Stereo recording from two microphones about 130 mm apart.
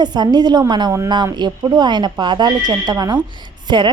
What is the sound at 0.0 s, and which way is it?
A woman's voice, 35° right (ahead or behind).